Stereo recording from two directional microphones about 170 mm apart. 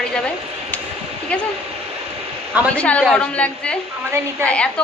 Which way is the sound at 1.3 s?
5° left (ahead or behind).